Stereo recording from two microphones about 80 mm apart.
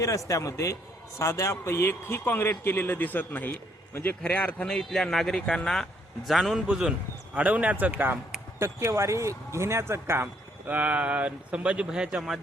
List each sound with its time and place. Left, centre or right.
0.0 s a man's voice: left
4.6 s speech: centre; by 8.2 s right
8.5 s speech: right
10.7 s speech: centre